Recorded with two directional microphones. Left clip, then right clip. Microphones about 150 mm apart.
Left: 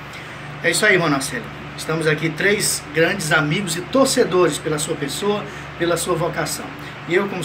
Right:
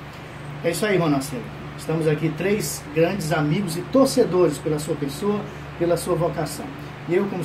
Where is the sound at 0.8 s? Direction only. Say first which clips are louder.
Left 5 dB; centre (ahead or behind).